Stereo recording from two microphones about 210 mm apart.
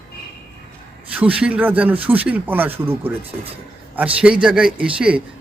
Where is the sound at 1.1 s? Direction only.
5° right (ahead or behind).